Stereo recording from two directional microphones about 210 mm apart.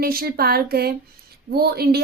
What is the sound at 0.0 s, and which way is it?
A woman's voice, 45° right (ahead or behind).